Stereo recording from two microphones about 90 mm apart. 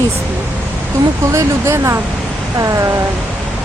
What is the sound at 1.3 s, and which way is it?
Speech, 30° right (ahead or behind).